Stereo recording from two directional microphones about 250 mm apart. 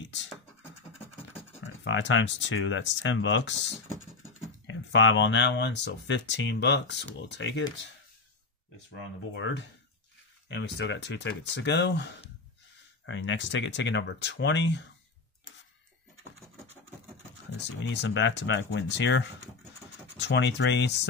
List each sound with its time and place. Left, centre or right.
0.0 s scratch: left
1.9 s speech: left
4.6 s speech: left
9.3 s speech: left
17.6 s speech: left